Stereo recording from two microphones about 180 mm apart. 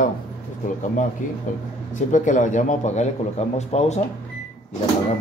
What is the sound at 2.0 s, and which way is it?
A man's voice, 45° left (ahead or behind).